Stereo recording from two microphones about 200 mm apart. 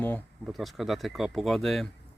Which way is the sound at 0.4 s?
Centre (ahead or behind).